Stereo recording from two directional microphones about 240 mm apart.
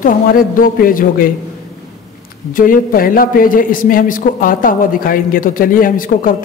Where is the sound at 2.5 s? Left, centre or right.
Left.